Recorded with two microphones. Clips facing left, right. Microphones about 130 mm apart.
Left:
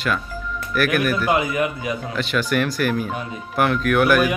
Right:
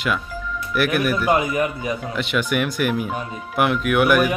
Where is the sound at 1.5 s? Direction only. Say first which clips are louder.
Even; 35° right (ahead or behind).